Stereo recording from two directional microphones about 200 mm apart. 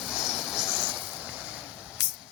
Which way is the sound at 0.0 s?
5° right (ahead or behind).